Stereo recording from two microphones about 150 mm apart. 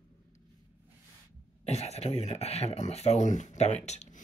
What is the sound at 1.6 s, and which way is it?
Speech, 45° left (ahead or behind).